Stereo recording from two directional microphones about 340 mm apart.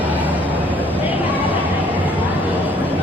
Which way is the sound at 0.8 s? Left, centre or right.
Centre.